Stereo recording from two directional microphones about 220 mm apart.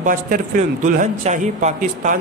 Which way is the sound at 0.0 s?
40° right (ahead or behind).